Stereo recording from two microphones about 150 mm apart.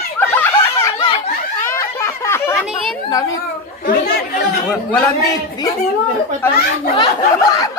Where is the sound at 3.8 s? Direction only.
80° left.